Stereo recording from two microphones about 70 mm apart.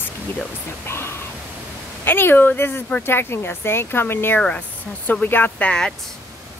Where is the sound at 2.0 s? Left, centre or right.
Left.